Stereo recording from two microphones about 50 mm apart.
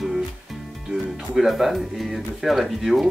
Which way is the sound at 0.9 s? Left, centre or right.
Centre.